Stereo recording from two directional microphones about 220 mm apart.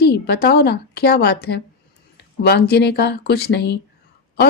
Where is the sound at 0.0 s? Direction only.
45° left (ahead or behind).